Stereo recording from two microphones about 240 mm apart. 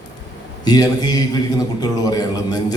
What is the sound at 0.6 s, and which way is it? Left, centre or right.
A man's voice, centre.